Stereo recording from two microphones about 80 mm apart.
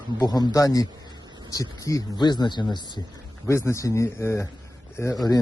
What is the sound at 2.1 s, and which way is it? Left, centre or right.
Speech, left.